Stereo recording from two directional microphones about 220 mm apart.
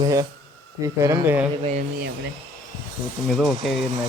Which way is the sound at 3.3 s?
Centre (ahead or behind).